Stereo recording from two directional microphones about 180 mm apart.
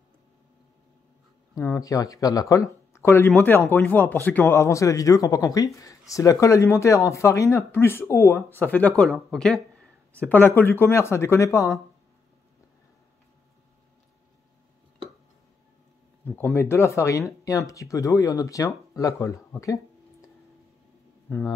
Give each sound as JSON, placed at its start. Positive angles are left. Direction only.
{"t": 1.5, "sound": "speech", "side_deg": 20}
{"t": 16.5, "sound": "speech", "side_deg": 15}
{"t": 21.3, "sound": "speech", "side_deg": 10}